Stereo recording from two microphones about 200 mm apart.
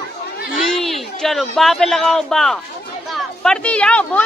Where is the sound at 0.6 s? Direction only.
Centre (ahead or behind).